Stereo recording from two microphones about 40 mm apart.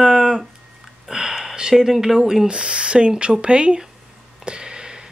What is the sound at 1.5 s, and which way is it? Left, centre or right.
Speech, centre.